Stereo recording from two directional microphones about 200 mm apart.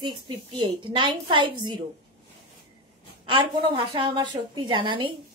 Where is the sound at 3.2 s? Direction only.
25° right (ahead or behind).